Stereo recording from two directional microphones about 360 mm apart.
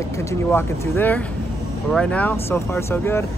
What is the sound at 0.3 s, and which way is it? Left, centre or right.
Speech, centre.